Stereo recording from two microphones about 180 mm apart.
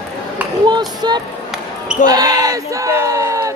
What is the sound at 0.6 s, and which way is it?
Speech, 25° right (ahead or behind).